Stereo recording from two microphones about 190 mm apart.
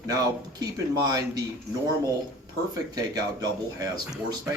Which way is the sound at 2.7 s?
20° right (ahead or behind).